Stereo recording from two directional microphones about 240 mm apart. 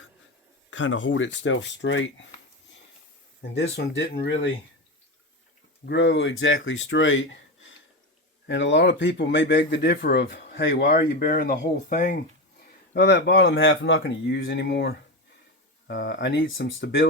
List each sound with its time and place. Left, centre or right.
0.7 s speech: left
3.5 s speech: left
5.8 s speech: left